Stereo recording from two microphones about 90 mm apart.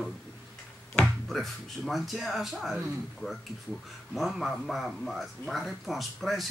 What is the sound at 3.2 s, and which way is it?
Speech, 15° left (ahead or behind).